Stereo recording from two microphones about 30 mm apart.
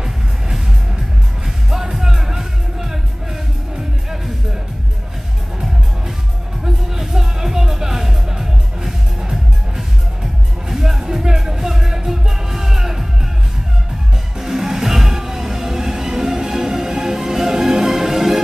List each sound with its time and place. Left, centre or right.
1.4 s music: centre
6.6 s music: centre
14.4 s music: centre